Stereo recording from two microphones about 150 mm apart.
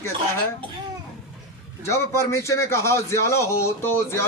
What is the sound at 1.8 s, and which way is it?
A man's voice, 20° left (ahead or behind).